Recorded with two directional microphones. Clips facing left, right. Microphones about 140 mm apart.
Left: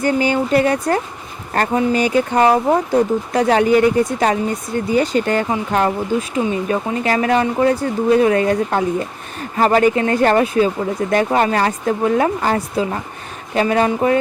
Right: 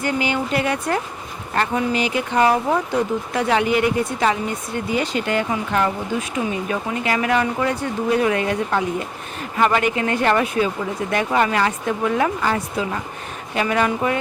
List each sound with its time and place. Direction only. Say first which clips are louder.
0.0 s speech: left 5 dB; 40° left (ahead or behind)